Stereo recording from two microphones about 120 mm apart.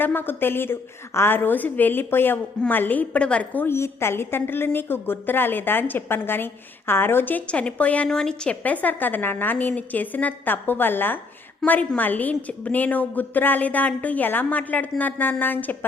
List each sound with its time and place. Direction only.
0.0 s a woman's voice: 15° left (ahead or behind)